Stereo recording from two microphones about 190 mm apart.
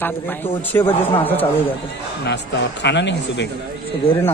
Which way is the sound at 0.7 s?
10° left (ahead or behind).